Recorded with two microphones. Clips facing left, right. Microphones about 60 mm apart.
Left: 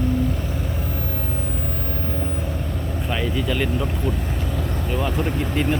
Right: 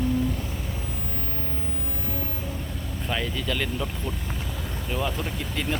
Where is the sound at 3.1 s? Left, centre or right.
Centre.